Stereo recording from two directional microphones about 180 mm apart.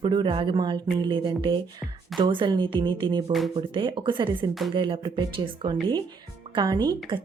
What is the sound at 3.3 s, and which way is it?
Speech, centre (ahead or behind).